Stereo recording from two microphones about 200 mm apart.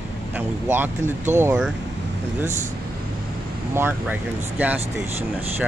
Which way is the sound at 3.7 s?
10° right (ahead or behind).